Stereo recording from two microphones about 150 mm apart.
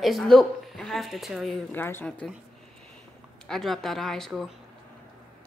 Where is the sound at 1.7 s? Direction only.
15° left (ahead or behind).